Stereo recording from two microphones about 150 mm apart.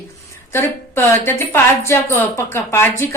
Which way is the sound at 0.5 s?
15° left (ahead or behind).